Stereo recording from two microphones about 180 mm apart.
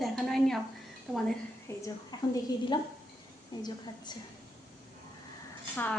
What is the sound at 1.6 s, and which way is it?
A woman's voice, 20° left (ahead or behind).